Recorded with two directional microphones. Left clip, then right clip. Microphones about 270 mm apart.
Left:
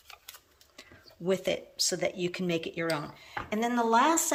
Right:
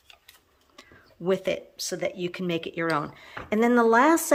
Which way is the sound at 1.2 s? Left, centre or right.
Centre.